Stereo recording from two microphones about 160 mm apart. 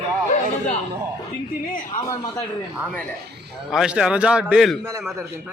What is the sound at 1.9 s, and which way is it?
Speech, 25° left (ahead or behind).